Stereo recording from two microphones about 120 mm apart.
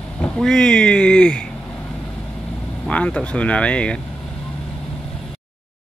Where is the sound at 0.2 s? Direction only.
5° left (ahead or behind).